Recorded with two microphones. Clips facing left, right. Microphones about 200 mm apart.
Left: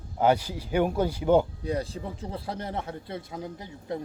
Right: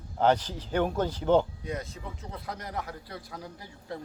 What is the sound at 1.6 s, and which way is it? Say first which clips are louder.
A man's voice: left 6 dB; 30° left (ahead or behind).